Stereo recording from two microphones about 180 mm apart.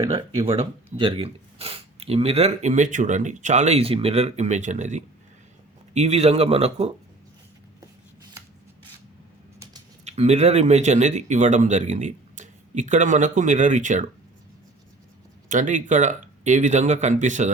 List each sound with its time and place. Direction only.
0.4 s speech: 30° right (ahead or behind)
10.0 s speech: 35° right (ahead or behind)
15.4 s speech: 45° right (ahead or behind)